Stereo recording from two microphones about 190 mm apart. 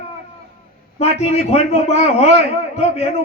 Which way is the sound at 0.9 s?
35° left (ahead or behind).